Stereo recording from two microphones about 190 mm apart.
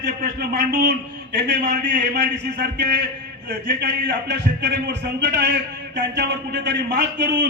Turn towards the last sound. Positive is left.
turn(degrees=-65)  # may be behind; listen again after turning